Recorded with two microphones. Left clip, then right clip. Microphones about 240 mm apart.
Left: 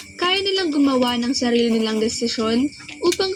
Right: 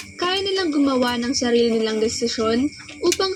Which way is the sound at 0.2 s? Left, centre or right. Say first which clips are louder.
Left 2 dB; left.